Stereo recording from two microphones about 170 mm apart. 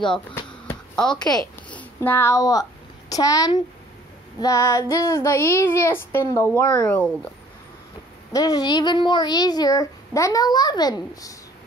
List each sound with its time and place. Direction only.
0.1 s a sound: 5° left (ahead or behind)
1.7 s a child's voice: 10° left (ahead or behind)
4.4 s child singing: 20° left (ahead or behind)
8.3 s speech: 20° left (ahead or behind)